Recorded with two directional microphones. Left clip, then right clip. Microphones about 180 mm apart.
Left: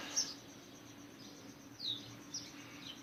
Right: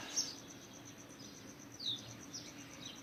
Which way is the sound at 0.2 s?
15° left (ahead or behind).